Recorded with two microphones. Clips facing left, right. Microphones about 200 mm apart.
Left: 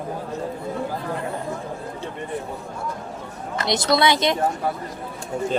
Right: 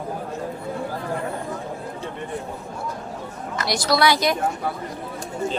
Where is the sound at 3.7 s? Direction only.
20° left (ahead or behind).